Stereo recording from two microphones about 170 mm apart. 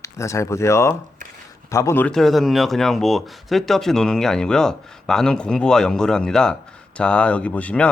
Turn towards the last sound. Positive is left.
turn(degrees=10)  # may be behind; listen again after turning